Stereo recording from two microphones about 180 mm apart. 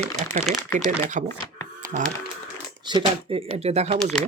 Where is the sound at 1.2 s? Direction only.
45° right (ahead or behind).